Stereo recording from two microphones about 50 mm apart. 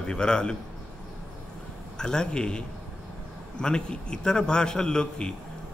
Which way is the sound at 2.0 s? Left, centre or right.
Centre.